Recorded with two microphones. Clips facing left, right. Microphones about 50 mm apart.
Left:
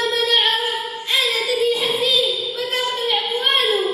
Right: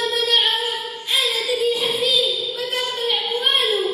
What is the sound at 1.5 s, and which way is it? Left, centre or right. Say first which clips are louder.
Music: left 1 dB; left.